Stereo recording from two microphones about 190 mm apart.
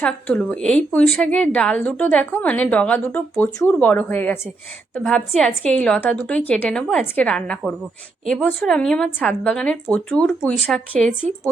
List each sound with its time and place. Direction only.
0.0 s a woman's voice: 5° left (ahead or behind)